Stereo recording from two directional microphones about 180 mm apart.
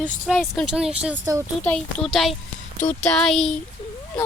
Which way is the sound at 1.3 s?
15° right (ahead or behind).